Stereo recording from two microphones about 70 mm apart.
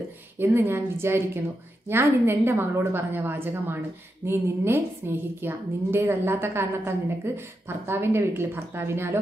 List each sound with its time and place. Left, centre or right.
0.4 s a woman's voice: right